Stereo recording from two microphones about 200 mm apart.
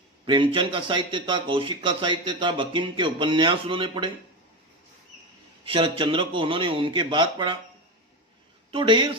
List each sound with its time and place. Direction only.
0.3 s speech: 25° right (ahead or behind)
5.6 s speech: 25° right (ahead or behind)
8.7 s speech: 25° right (ahead or behind)